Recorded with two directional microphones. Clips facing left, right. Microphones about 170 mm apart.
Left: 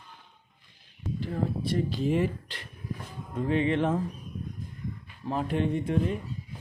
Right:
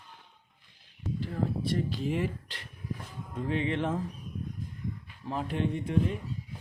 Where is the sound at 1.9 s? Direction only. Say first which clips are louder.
Left 5 dB; 35° left (ahead or behind).